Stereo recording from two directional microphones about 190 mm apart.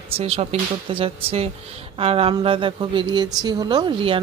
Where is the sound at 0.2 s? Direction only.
30° right (ahead or behind).